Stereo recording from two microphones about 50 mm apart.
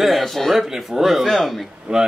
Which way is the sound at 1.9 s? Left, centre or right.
Centre.